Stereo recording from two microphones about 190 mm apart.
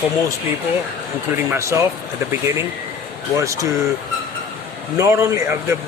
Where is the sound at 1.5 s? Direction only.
15° right (ahead or behind).